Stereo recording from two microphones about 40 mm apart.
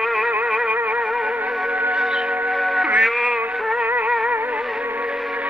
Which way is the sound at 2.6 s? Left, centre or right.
Centre.